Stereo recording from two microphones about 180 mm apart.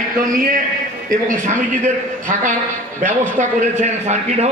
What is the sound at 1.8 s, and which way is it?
A man's voice, 45° right (ahead or behind).